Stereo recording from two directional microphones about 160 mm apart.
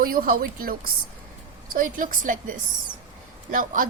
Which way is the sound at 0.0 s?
70° right (ahead or behind).